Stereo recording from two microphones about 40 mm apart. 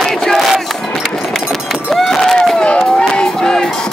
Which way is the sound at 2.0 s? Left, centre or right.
Centre.